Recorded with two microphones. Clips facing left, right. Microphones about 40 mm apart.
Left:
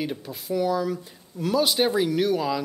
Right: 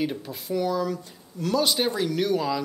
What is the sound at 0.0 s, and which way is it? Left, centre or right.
Speech, centre.